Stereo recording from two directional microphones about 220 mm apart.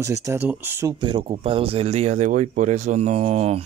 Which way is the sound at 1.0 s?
20° right (ahead or behind).